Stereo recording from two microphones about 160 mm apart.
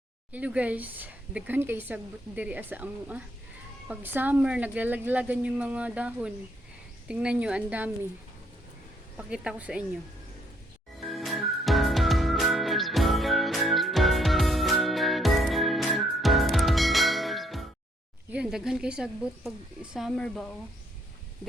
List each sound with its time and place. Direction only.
0.3 s a woman's voice: 10° right (ahead or behind)
9.1 s a woman's voice: 5° right (ahead or behind)
11.0 s music: centre (ahead or behind)
18.3 s speech: 5° right (ahead or behind)